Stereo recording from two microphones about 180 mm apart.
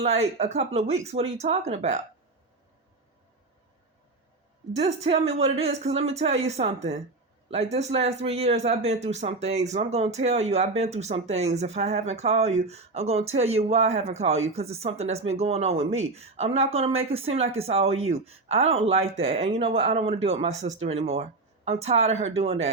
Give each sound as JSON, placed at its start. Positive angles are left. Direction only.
{"t": 0.0, "sound": "speech", "side_deg": -40}
{"t": 4.7, "sound": "speech", "side_deg": -35}